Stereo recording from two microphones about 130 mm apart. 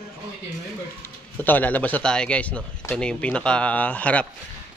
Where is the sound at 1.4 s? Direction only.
15° left (ahead or behind).